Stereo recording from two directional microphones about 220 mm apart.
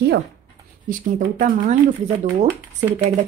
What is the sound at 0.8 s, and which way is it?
Speech, 35° right (ahead or behind).